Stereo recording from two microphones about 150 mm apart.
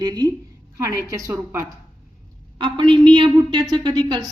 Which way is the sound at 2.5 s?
30° right (ahead or behind).